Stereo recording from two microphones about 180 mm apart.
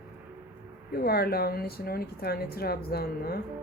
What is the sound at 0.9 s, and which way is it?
Speech, 60° left (ahead or behind).